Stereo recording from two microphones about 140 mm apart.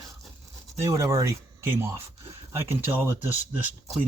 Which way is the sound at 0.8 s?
20° right (ahead or behind).